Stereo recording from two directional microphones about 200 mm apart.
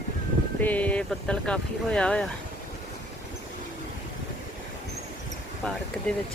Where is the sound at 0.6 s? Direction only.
10° left (ahead or behind).